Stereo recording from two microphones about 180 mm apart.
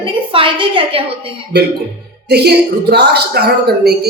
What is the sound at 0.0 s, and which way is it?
A woman's voice, 30° right (ahead or behind).